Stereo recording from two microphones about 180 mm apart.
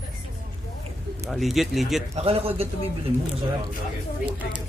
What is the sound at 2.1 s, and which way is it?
Speech, 35° right (ahead or behind).